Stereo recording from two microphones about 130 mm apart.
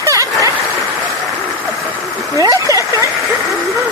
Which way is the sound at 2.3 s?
25° right (ahead or behind).